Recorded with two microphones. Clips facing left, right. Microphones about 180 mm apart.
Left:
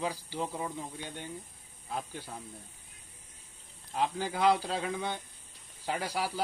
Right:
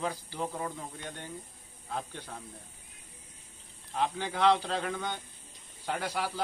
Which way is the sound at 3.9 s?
10° left (ahead or behind).